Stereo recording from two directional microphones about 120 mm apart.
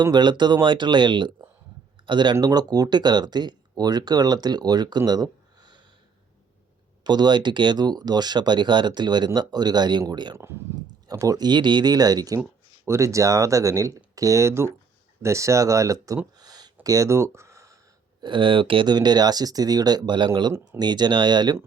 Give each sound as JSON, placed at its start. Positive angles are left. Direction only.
{"t": 0.0, "sound": "speech", "side_deg": -35}
{"t": 7.0, "sound": "speech", "side_deg": -35}
{"t": 16.4, "sound": "a sound", "side_deg": -35}
{"t": 18.2, "sound": "speech", "side_deg": -45}